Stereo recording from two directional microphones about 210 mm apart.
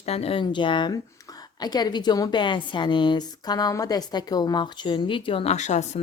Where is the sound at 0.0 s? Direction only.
30° left (ahead or behind).